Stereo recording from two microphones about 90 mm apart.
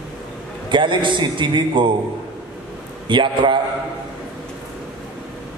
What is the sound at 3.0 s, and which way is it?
Speech, 65° right (ahead or behind).